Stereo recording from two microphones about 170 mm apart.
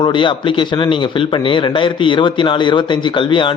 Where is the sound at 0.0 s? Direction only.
30° left (ahead or behind).